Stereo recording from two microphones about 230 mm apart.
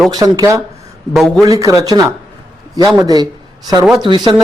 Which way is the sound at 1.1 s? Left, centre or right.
Centre.